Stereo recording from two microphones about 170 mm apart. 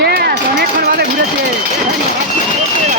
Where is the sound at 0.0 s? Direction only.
70° right (ahead or behind).